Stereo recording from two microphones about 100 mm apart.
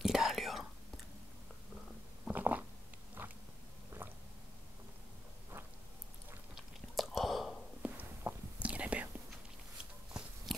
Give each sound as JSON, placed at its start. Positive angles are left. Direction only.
{"t": 0.0, "sound": "whispering", "side_deg": -5}
{"t": 2.2, "sound": "a sound", "side_deg": -15}
{"t": 4.0, "sound": "squish", "side_deg": -20}
{"t": 6.5, "sound": "chewing", "side_deg": 0}
{"t": 7.8, "sound": "walk", "side_deg": -15}
{"t": 8.6, "sound": "whispering", "side_deg": -15}